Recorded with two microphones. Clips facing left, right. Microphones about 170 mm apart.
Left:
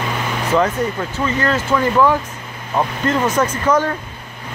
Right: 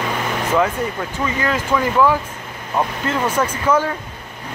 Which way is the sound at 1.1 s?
10° right (ahead or behind).